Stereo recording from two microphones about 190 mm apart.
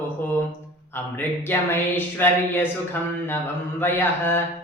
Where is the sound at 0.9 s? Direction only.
10° left (ahead or behind).